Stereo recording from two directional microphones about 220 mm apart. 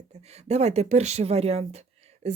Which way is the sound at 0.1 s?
30° right (ahead or behind).